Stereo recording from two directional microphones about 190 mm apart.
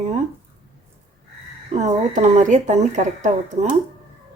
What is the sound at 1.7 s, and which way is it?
Speech, 35° right (ahead or behind).